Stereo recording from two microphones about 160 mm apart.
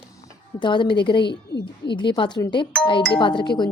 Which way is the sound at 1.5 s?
90° left.